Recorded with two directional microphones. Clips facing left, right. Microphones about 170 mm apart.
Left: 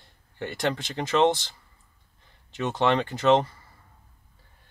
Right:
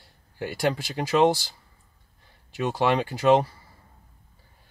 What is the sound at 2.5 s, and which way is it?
Speech, 10° right (ahead or behind).